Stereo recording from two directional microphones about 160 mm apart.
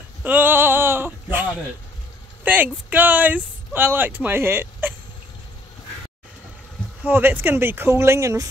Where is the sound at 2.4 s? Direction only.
10° right (ahead or behind).